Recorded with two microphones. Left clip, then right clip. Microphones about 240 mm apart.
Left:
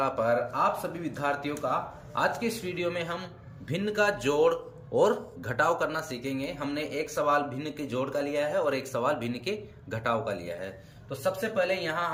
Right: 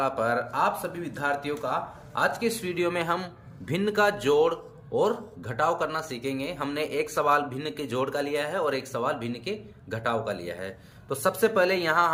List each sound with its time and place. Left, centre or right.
0.0 s a man's voice: centre
11.1 s a man's voice: centre